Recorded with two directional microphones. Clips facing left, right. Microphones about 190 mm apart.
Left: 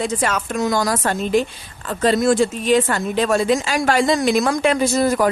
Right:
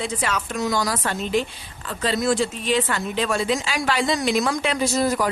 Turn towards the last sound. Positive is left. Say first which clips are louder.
# left 4 dB
turn(degrees=50)  # may be behind; listen again after turning